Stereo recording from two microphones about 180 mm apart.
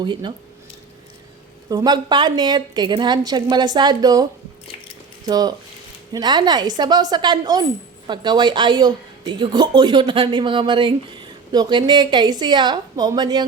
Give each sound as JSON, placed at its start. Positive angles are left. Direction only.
{"t": 0.0, "sound": "a woman's voice", "side_deg": -25}
{"t": 1.7, "sound": "a woman's voice", "side_deg": -20}